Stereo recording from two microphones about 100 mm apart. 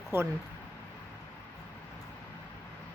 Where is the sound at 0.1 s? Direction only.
20° right (ahead or behind).